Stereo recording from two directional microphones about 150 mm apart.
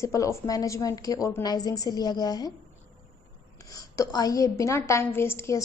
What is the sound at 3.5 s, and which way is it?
A woman's voice, 25° left (ahead or behind).